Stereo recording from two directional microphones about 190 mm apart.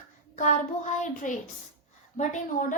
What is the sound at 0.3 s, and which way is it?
A woman's voice, 40° left (ahead or behind).